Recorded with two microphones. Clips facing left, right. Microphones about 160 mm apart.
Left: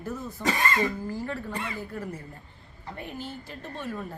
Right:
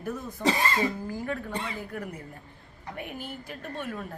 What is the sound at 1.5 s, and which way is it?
A woman's voice, 20° right (ahead or behind).